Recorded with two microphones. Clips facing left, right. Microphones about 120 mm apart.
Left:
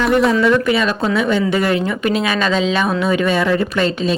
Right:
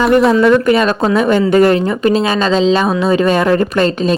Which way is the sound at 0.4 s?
45° right (ahead or behind).